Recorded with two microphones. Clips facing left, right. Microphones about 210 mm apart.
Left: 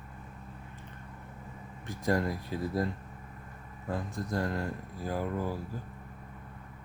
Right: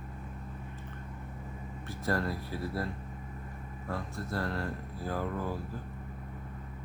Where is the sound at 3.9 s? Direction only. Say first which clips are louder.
Left 3 dB; 15° left (ahead or behind).